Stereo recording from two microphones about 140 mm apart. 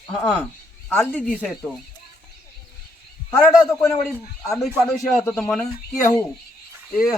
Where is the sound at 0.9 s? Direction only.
5° left (ahead or behind).